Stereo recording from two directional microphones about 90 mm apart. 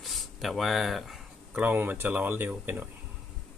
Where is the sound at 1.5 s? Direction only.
20° right (ahead or behind).